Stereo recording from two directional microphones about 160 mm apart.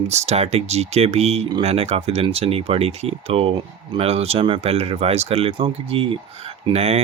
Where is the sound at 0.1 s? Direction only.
40° right (ahead or behind).